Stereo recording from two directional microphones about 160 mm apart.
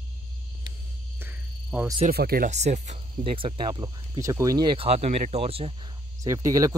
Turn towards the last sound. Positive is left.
turn(degrees=-20)  # may be behind; listen again after turning